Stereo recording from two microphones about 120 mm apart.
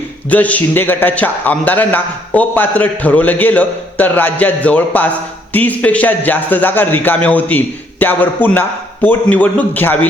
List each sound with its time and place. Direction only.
0.3 s a man's voice: 10° left (ahead or behind)